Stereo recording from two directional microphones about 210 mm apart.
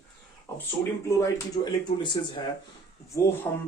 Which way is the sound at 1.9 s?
25° left (ahead or behind).